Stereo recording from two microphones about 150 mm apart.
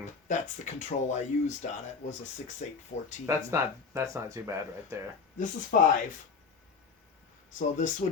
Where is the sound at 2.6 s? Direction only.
55° left (ahead or behind).